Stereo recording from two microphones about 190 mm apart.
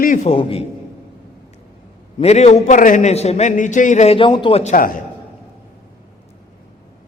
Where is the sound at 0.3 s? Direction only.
30° left (ahead or behind).